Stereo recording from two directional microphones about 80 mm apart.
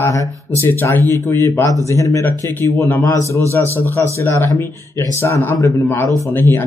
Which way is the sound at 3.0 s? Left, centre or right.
Left.